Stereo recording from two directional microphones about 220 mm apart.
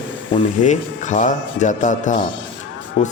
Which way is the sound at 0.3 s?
30° left (ahead or behind).